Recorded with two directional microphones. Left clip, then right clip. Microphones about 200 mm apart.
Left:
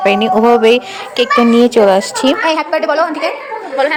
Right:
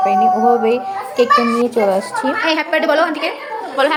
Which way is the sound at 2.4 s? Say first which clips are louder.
Left 2 dB; 10° left (ahead or behind).